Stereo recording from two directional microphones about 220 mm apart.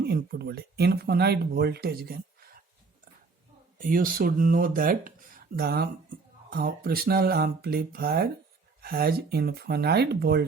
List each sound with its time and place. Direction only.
0.0 s speech: 50° right (ahead or behind)
3.8 s speech: 40° right (ahead or behind)